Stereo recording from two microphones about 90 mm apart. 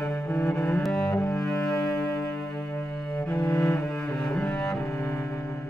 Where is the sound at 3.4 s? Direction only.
35° left (ahead or behind).